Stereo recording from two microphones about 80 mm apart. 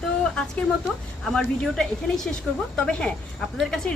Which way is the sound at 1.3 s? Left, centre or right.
Centre.